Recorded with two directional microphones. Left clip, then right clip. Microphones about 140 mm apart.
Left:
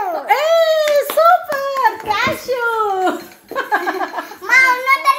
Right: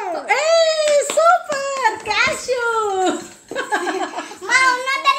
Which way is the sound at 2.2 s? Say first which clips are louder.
Even; 20° right (ahead or behind).